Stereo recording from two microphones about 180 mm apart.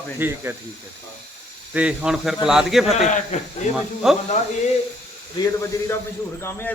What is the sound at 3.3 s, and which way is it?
Speech, 40° left (ahead or behind).